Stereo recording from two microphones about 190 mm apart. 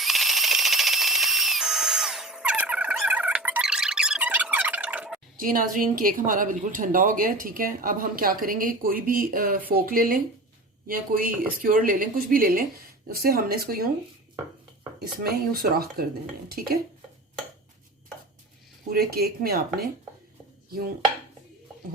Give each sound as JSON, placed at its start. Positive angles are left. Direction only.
{"t": 0.0, "sound": "a sound", "side_deg": 0}
{"t": 5.4, "sound": "speech", "side_deg": -45}
{"t": 14.9, "sound": "speech", "side_deg": -55}
{"t": 18.9, "sound": "speech", "side_deg": -55}